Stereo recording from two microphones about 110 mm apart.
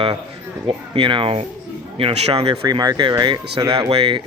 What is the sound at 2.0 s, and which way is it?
Speech, 65° right (ahead or behind).